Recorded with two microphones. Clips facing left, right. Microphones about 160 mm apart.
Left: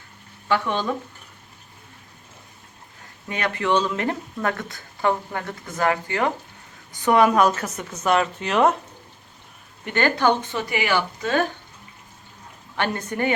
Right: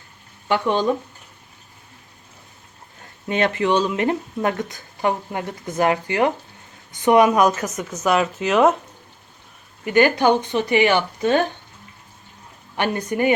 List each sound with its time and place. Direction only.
0.4 s speech: 20° right (ahead or behind)
3.2 s a woman's voice: 25° right (ahead or behind); by 8.7 s 5° right (ahead or behind)
9.8 s speech: 10° right (ahead or behind)
12.7 s a woman's voice: 15° right (ahead or behind)